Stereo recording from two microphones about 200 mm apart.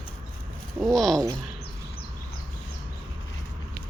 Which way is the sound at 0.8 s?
Centre (ahead or behind).